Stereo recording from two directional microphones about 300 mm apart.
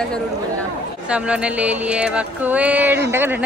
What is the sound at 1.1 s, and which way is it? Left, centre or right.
Speech, centre.